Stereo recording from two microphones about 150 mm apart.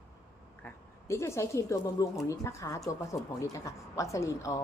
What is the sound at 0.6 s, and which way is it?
A woman's voice, 15° left (ahead or behind).